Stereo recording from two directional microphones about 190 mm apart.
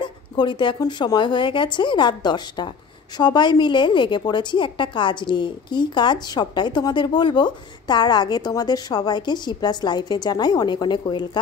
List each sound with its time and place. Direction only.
0.0 s a woman's voice: 25° left (ahead or behind)